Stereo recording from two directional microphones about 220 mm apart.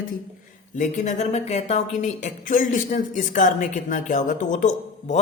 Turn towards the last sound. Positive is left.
turn(degrees=35)  # may be behind; listen again after turning